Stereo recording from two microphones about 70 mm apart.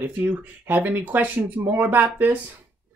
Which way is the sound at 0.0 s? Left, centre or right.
Right.